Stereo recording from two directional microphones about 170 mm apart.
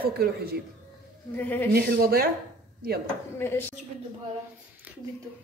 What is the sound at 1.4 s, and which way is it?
Speech, 10° left (ahead or behind).